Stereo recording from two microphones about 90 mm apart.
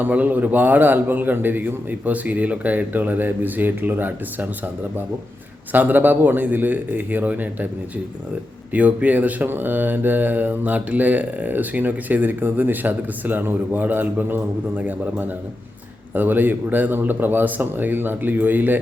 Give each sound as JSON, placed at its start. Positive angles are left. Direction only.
{"t": 0.0, "sound": "speech", "side_deg": -20}
{"t": 8.7, "sound": "speech", "side_deg": -15}